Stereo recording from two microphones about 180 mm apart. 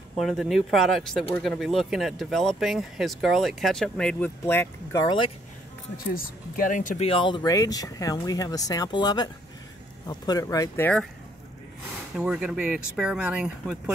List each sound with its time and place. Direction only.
0.2 s speech: centre (ahead or behind)
6.1 s speech: 50° left (ahead or behind)
7.1 s speech: 30° left (ahead or behind)
12.2 s speech: 5° right (ahead or behind)